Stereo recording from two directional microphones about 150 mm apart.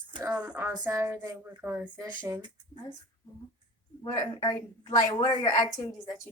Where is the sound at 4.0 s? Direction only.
25° left (ahead or behind).